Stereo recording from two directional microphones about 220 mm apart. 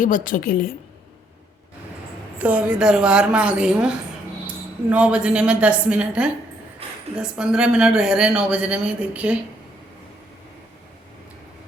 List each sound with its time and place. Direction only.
0.0 s a woman's voice: 40° left (ahead or behind)
2.4 s a woman's voice: 5° right (ahead or behind)